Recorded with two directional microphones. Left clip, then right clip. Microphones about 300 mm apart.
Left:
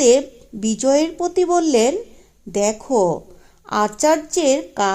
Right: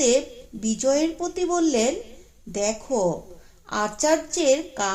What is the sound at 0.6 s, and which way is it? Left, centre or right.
Speech, left.